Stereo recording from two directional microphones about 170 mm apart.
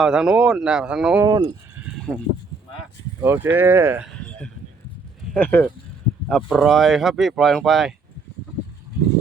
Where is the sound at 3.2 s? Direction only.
15° right (ahead or behind).